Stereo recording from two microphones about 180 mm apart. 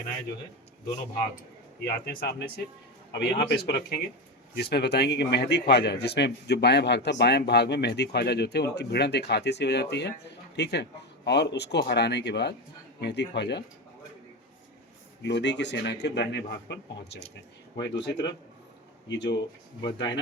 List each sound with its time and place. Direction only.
1.8 s a man's voice: 65° left (ahead or behind)
15.2 s a man's voice: 75° left (ahead or behind)